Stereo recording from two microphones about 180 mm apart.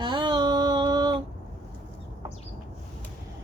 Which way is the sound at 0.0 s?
25° right (ahead or behind).